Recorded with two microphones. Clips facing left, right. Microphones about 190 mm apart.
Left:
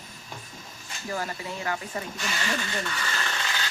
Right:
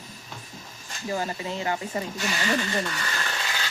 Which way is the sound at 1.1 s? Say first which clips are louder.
Right 3 dB; 20° right (ahead or behind).